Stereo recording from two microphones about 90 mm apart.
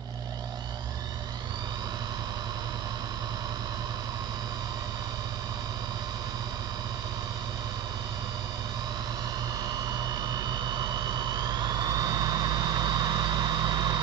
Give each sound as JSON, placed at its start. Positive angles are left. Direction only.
{"t": 10.3, "sound": "jet engine", "side_deg": -55}